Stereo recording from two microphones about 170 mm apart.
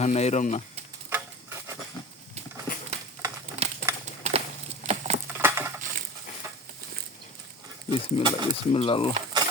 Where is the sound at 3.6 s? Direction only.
40° right (ahead or behind).